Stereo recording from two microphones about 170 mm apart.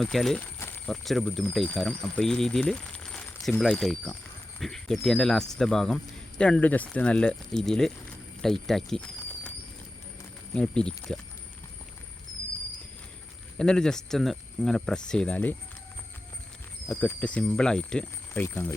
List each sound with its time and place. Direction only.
0.0 s speech: centre (ahead or behind)
10.5 s speech: 5° left (ahead or behind)
13.6 s speech: 5° left (ahead or behind)
16.9 s speech: 5° left (ahead or behind)